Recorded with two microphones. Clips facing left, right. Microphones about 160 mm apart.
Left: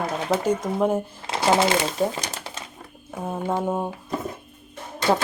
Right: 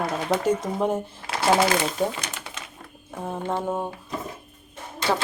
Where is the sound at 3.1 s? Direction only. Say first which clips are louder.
Left 2 dB; 10° left (ahead or behind).